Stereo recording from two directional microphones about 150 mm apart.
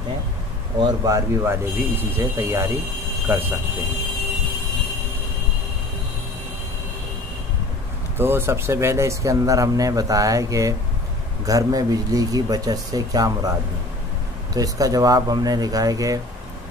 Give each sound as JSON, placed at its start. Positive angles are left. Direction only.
{"t": 1.0, "sound": "speech", "side_deg": -20}
{"t": 8.2, "sound": "speech", "side_deg": -15}
{"t": 14.5, "sound": "speech", "side_deg": -25}